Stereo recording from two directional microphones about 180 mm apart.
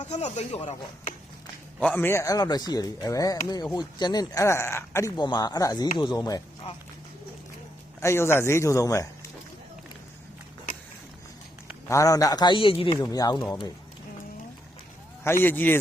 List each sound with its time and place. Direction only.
0.0 s speech: 40° left (ahead or behind)
1.8 s speech: 10° left (ahead or behind)
8.0 s speech: 15° left (ahead or behind)
11.9 s speech: 15° left (ahead or behind)
15.2 s speech: 15° left (ahead or behind)